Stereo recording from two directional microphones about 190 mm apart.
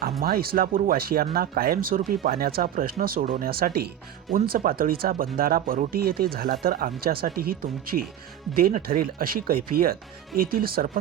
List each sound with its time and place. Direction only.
0.2 s speech: 50° right (ahead or behind)